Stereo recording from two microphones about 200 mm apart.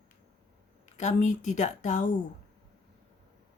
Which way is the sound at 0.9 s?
35° left (ahead or behind).